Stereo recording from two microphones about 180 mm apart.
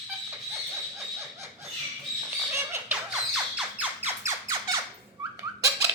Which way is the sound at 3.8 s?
10° right (ahead or behind).